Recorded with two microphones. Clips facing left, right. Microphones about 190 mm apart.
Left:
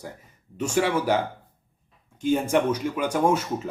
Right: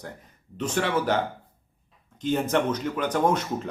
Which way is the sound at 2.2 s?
10° left (ahead or behind).